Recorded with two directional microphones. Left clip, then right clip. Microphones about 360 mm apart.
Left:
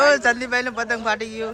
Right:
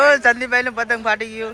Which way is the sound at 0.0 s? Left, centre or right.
Centre.